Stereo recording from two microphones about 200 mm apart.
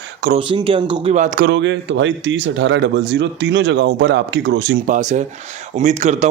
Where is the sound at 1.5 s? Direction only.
65° right (ahead or behind).